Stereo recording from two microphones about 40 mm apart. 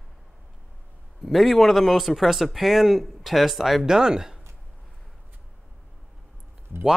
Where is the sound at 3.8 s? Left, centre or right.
Centre.